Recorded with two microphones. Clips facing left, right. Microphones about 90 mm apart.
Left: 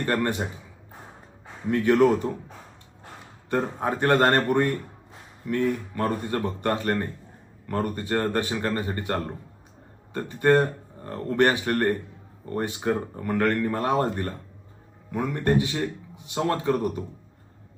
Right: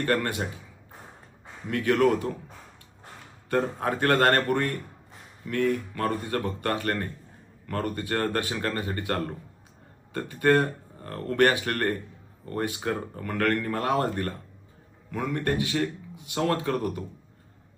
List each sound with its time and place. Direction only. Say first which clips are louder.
0.0 s speech: left 1 dB; 25° left (ahead or behind)
1.7 s speech: left 3 dB; 20° left (ahead or behind)
3.5 s speech: even; 15° left (ahead or behind)